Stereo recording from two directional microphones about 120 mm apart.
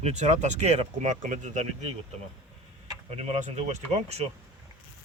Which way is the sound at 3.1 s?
60° right (ahead or behind).